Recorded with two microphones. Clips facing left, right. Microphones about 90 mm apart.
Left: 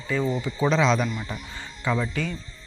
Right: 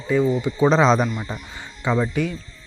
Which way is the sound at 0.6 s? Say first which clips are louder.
Right 5 dB; 35° right (ahead or behind).